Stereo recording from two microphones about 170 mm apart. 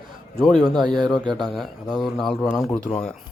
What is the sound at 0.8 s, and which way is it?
Speech, 25° right (ahead or behind).